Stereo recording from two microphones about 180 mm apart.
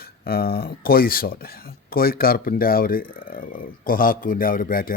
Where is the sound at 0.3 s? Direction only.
60° left (ahead or behind).